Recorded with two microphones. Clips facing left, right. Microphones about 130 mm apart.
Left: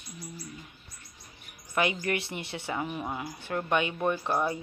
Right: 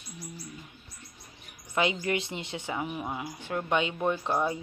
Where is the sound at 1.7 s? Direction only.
20° right (ahead or behind).